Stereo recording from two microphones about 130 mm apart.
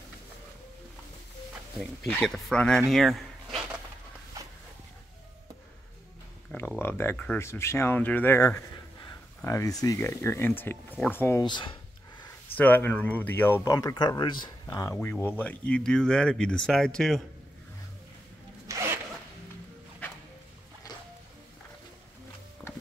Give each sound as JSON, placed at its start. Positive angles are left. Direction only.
{"t": 2.2, "sound": "speech", "side_deg": 5}
{"t": 6.8, "sound": "speech", "side_deg": 20}
{"t": 11.4, "sound": "a sound", "side_deg": 35}
{"t": 12.5, "sound": "speech", "side_deg": 15}
{"t": 18.7, "sound": "zipper", "side_deg": -20}